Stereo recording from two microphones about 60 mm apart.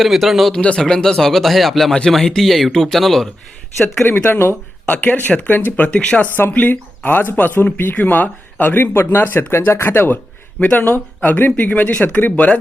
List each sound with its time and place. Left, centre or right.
0.0 s speech: centre
0.8 s speech: centre
4.0 s speech: left
4.9 s speech: left
6.2 s speech: left
9.5 s speech: left
10.6 s speech: left